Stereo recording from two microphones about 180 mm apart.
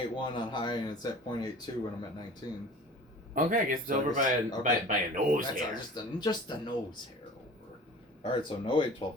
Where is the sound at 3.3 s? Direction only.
50° right (ahead or behind).